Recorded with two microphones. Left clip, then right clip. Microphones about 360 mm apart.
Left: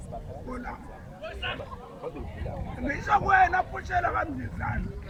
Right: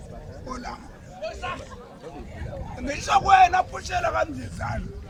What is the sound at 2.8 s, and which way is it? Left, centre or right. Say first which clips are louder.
A man's voice: right 5 dB; centre.